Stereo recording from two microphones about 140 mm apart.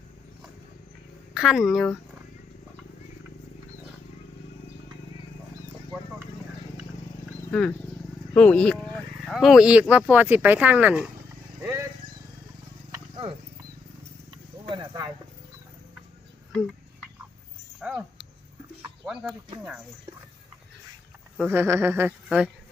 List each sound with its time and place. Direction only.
1.3 s speech: centre (ahead or behind)
7.5 s speech: 10° left (ahead or behind); by 11.1 s 10° right (ahead or behind)
11.6 s vehicle: 20° right (ahead or behind)
14.7 s a sound: 30° right (ahead or behind)
17.7 s a sound: 5° right (ahead or behind)
19.0 s speech: 5° right (ahead or behind)
21.5 s speech: 15° right (ahead or behind)